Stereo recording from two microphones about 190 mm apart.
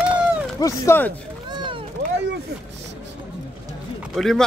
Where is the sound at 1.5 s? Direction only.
25° right (ahead or behind).